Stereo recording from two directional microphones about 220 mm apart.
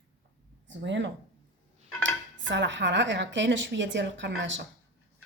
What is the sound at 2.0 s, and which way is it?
A woman's voice, 55° right (ahead or behind).